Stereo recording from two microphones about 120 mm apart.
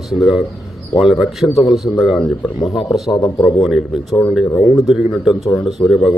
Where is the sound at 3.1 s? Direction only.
35° left (ahead or behind).